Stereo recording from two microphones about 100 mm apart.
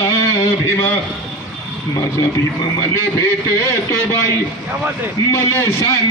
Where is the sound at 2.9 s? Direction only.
30° left (ahead or behind).